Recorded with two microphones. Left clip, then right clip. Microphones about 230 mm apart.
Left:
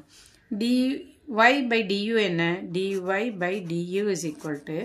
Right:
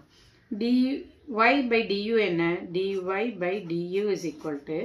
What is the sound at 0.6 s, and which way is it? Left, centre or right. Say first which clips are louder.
Speech: left 1 dB; left.